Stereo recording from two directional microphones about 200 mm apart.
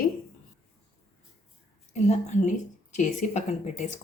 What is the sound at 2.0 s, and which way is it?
Speech, 35° left (ahead or behind).